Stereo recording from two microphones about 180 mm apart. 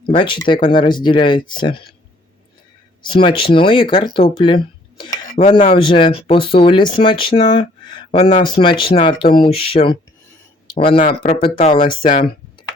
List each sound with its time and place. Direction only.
0.0 s speech: 25° left (ahead or behind)
3.1 s speech: 25° left (ahead or behind)
11.0 s speech: 45° left (ahead or behind)
11.3 s speech: 30° left (ahead or behind)